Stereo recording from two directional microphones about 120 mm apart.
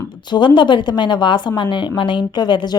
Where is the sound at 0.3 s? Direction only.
40° left (ahead or behind).